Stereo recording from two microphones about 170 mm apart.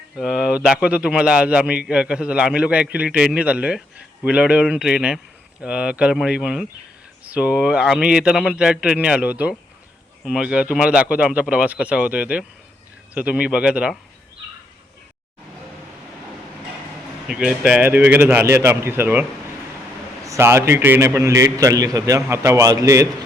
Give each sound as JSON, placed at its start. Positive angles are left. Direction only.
{"t": 0.2, "sound": "a man's voice", "side_deg": -5}
{"t": 17.2, "sound": "a man's voice", "side_deg": -5}
{"t": 20.2, "sound": "a man's voice", "side_deg": -15}